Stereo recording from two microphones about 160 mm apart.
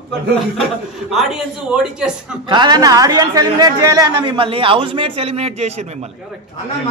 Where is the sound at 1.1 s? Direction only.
Centre (ahead or behind).